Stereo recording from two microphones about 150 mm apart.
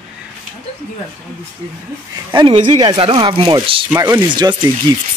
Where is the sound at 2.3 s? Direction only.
35° right (ahead or behind).